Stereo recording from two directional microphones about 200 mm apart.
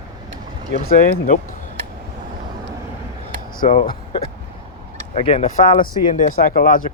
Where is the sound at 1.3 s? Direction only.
40° left (ahead or behind).